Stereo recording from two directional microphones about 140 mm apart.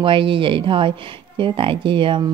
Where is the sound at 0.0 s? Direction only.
40° right (ahead or behind).